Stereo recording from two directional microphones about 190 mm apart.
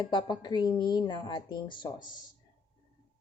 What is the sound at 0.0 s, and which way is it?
Speech, 25° left (ahead or behind).